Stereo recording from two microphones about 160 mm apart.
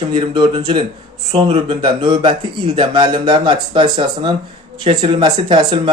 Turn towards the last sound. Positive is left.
turn(degrees=-30)  # may be behind; listen again after turning